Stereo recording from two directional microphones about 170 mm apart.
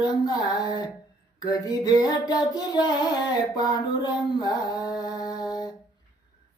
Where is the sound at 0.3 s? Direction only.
25° left (ahead or behind).